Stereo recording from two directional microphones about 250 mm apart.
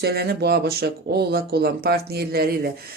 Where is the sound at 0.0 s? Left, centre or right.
Right.